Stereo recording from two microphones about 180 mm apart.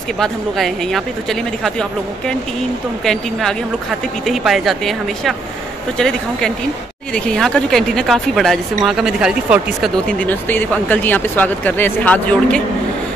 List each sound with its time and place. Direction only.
0.2 s a woman's voice: centre (ahead or behind)
4.3 s a woman's voice: centre (ahead or behind)